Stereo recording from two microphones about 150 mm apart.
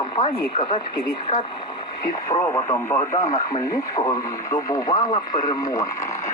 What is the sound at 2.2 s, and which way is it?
Speech, 15° left (ahead or behind).